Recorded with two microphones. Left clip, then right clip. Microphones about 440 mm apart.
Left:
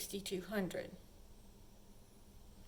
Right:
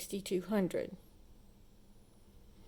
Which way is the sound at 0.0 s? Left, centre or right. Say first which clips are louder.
Right 6 dB; centre.